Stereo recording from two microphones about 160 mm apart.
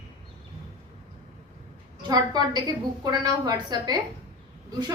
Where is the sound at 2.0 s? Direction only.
25° right (ahead or behind).